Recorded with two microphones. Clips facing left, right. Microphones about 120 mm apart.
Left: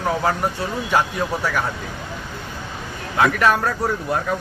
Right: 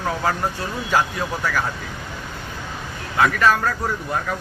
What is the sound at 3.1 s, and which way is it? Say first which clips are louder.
Speech: even; 25° left (ahead or behind).